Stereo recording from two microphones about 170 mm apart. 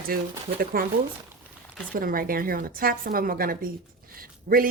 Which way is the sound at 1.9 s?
55° right (ahead or behind).